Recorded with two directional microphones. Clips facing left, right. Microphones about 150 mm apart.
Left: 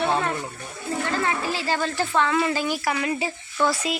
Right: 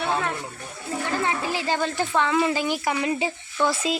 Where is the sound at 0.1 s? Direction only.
Centre (ahead or behind).